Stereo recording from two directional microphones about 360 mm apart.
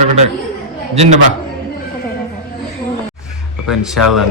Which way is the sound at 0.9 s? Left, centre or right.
Centre.